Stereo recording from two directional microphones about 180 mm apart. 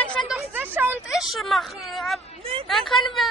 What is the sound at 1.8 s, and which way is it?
Speech, centre (ahead or behind).